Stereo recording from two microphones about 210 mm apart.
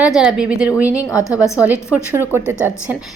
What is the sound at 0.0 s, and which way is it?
Speech, 5° right (ahead or behind).